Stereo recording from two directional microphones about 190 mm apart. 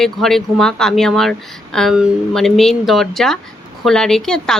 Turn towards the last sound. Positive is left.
turn(degrees=5)  # may be behind; listen again after turning